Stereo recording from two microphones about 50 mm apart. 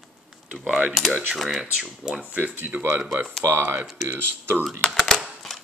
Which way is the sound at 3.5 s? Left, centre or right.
Right.